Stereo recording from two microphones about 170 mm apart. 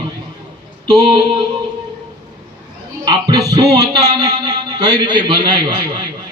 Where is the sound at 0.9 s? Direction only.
25° right (ahead or behind).